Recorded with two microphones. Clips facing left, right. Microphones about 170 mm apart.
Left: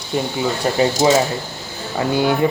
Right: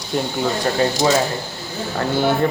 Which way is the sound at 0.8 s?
25° left (ahead or behind).